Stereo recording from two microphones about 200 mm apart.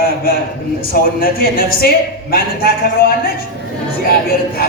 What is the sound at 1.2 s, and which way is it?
Speech, 50° left (ahead or behind).